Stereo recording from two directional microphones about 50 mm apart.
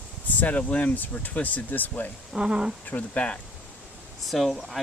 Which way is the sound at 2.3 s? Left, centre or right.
Centre.